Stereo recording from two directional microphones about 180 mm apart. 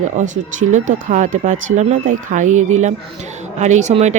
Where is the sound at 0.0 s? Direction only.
45° right (ahead or behind).